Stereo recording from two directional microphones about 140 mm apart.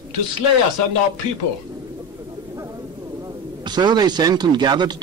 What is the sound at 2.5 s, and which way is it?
A man's voice, 25° right (ahead or behind).